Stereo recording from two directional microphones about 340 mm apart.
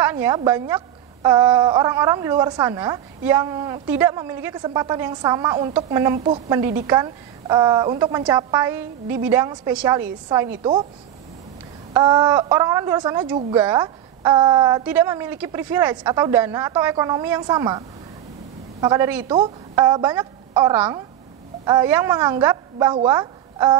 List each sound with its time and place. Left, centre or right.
0.0 s a woman's voice: centre
11.9 s a woman's voice: centre